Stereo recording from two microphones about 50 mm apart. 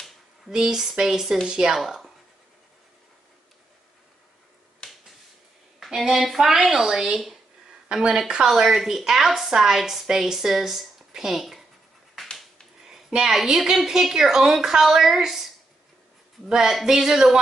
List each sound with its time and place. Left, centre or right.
0.5 s a woman's voice: centre
1.9 s writing: centre
4.8 s finger snapping: centre
5.9 s a woman's voice: centre
12.2 s finger snapping: centre
12.8 s a sound: centre
13.4 s a woman's voice: centre